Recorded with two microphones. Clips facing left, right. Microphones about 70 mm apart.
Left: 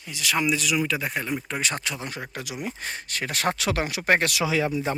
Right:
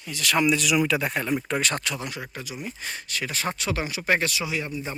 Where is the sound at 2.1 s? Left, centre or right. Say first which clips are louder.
Left 1 dB; left.